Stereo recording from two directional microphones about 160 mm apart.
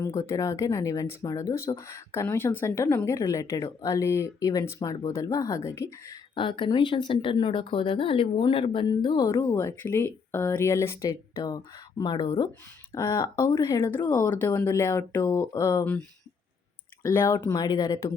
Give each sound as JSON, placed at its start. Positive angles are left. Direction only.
{"t": 0.0, "sound": "speech", "side_deg": 20}
{"t": 6.3, "sound": "speech", "side_deg": 30}
{"t": 17.1, "sound": "speech", "side_deg": 20}